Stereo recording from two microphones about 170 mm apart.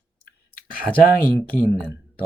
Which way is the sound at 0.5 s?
55° left (ahead or behind).